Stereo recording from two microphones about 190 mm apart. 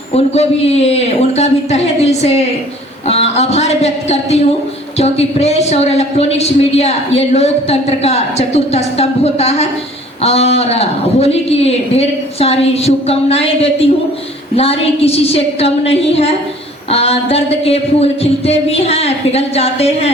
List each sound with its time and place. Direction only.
0.1 s a woman's voice: 35° left (ahead or behind)